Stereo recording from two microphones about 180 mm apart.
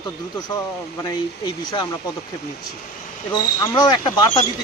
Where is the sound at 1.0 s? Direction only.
25° left (ahead or behind).